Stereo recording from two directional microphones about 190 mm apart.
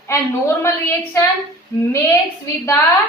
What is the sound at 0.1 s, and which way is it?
Speech, 15° left (ahead or behind).